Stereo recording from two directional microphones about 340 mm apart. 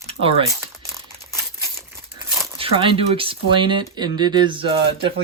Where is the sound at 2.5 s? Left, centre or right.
Centre.